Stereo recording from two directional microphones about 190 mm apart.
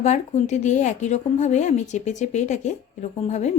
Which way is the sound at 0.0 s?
40° left (ahead or behind).